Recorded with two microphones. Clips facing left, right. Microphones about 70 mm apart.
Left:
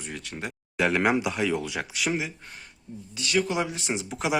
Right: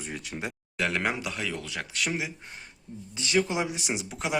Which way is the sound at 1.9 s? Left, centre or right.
Centre.